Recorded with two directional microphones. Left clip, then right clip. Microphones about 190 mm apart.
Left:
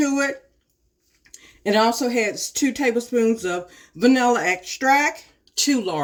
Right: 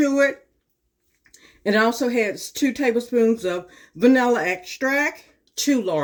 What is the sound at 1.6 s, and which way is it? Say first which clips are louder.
Speech: left 1 dB; 15° left (ahead or behind).